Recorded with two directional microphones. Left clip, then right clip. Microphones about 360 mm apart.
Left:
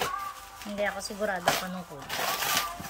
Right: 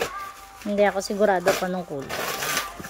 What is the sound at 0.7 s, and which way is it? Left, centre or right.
Speech, centre.